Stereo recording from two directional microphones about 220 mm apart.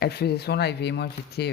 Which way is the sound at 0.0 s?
45° left (ahead or behind).